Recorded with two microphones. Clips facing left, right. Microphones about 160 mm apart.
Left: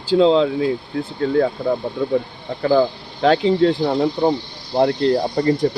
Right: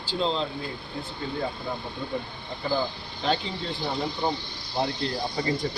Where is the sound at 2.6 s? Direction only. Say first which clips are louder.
Left 12 dB; 90° left.